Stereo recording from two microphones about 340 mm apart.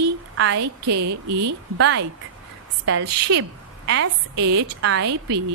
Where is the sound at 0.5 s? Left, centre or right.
Right.